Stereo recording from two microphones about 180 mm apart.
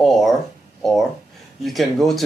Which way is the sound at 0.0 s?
Centre (ahead or behind).